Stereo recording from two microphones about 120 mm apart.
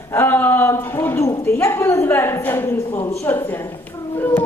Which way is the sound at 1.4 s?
20° left (ahead or behind).